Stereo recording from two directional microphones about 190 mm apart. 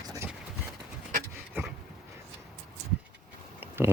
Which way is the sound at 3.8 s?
10° right (ahead or behind).